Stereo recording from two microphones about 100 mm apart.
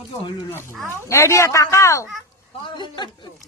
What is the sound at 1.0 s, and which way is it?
Speech, 30° left (ahead or behind).